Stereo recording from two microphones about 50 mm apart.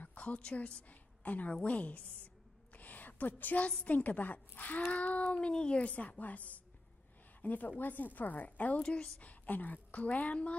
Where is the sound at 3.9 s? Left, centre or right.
Left.